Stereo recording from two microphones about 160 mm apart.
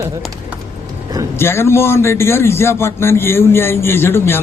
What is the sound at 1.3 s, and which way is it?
A man's voice, 15° left (ahead or behind).